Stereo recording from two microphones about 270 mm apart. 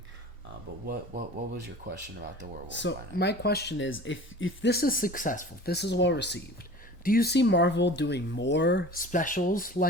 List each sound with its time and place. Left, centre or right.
0.9 s speech: right
2.7 s speech: left